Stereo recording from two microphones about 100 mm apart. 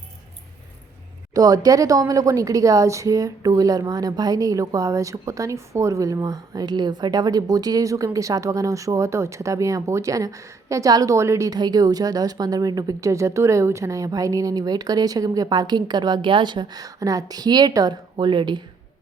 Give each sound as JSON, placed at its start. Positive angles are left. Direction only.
{"t": 1.3, "sound": "a woman's voice", "side_deg": -40}